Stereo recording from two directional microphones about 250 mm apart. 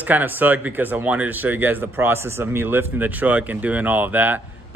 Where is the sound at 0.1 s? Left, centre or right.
Centre.